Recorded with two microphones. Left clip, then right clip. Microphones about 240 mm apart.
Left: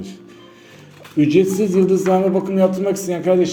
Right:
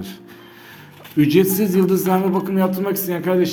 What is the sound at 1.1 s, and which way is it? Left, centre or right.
Speech, right.